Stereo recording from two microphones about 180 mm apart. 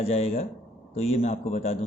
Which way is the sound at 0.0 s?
35° left (ahead or behind).